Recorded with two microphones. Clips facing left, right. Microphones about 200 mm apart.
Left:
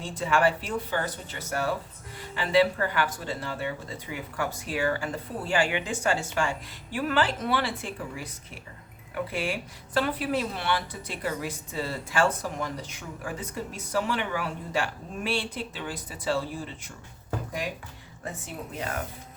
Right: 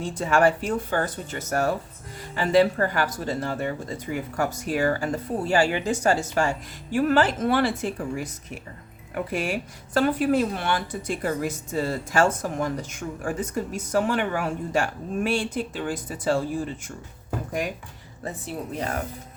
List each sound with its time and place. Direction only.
0.0 s speech: 45° right (ahead or behind)
9.3 s speech: 45° right (ahead or behind)
18.3 s speech: 35° right (ahead or behind)